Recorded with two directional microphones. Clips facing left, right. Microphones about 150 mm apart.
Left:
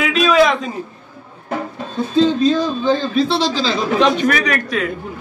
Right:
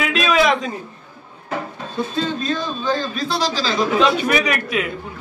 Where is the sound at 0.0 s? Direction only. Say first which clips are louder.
Left 4 dB; centre (ahead or behind).